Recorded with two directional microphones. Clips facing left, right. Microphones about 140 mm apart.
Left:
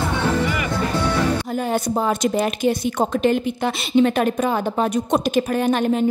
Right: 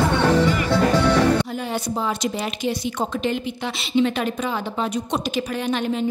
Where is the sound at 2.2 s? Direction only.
50° left (ahead or behind).